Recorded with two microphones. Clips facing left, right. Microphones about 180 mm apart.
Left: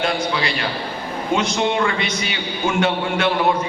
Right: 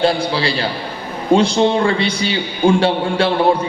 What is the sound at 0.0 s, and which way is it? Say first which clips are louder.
A man's voice: right 5 dB; 30° right (ahead or behind).